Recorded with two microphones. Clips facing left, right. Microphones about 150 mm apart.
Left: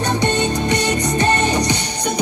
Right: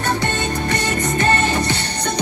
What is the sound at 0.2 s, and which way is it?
Music, 20° left (ahead or behind).